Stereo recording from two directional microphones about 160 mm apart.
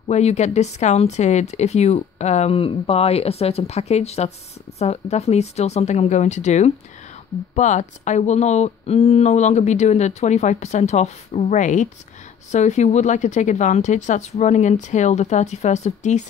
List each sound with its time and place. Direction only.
0.1 s speech: 45° left (ahead or behind)